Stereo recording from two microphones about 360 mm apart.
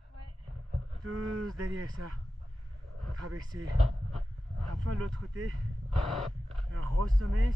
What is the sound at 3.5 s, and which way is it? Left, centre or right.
Speech, right.